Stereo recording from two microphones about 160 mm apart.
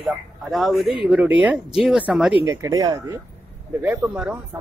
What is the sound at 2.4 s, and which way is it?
Speech, 20° right (ahead or behind).